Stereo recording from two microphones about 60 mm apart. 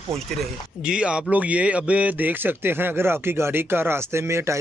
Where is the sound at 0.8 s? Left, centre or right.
Centre.